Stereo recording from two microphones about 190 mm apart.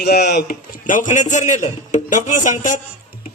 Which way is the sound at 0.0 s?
60° left (ahead or behind).